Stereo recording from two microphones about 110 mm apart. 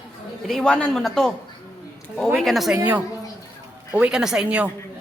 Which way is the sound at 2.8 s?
15° right (ahead or behind).